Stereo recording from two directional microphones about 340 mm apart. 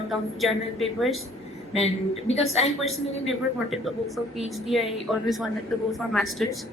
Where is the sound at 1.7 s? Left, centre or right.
Centre.